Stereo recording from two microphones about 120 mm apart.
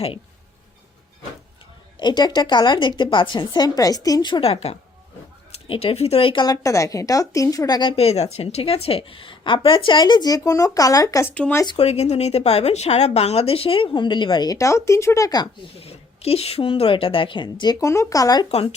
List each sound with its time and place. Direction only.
2.0 s a woman's voice: 35° left (ahead or behind)
4.4 s a woman's voice: 60° left (ahead or behind); by 7.8 s 30° left (ahead or behind)
7.8 s speech: 50° left (ahead or behind); by 11.3 s 25° left (ahead or behind)
11.3 s speech: 10° left (ahead or behind)
11.8 s speech: 60° left (ahead or behind); by 15.4 s 30° left (ahead or behind)
15.8 s speech: 55° left (ahead or behind); by 17.7 s 40° left (ahead or behind)
17.7 s speech: 25° left (ahead or behind)